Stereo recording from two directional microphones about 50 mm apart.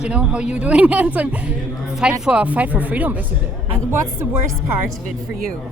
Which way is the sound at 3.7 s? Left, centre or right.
Right.